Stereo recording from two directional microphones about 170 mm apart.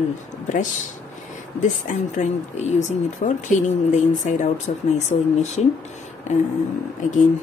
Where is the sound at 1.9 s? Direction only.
45° left (ahead or behind).